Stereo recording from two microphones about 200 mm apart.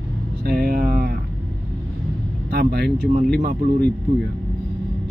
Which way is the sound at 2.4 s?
55° right (ahead or behind).